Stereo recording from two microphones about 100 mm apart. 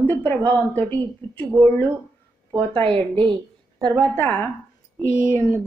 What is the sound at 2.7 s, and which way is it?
Speech, 70° right (ahead or behind).